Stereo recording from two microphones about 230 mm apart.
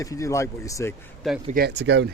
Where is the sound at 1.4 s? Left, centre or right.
Right.